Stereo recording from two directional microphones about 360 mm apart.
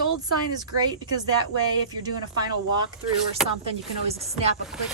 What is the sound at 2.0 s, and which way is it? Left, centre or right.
Speech, centre.